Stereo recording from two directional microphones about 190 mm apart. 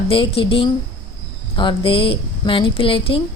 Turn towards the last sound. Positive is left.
turn(degrees=30)  # may be behind; listen again after turning